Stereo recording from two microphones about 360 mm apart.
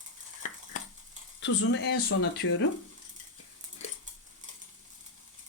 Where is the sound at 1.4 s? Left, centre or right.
Left.